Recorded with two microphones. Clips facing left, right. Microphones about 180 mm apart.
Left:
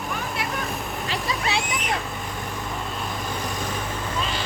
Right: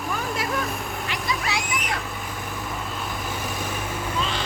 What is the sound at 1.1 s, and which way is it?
Vehicle, 35° left (ahead or behind).